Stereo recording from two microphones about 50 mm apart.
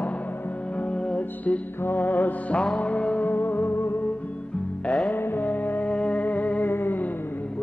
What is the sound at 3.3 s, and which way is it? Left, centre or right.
Music, left.